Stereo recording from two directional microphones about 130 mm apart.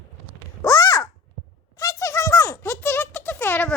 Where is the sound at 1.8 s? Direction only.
25° left (ahead or behind).